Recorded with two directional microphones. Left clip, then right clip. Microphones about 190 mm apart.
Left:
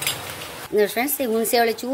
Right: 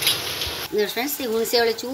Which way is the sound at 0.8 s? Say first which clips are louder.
Left 4 dB; 45° left (ahead or behind).